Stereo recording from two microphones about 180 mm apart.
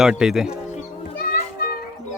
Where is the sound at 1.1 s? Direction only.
60° left (ahead or behind).